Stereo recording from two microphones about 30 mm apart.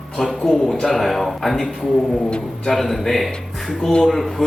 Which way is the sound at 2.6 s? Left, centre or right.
Centre.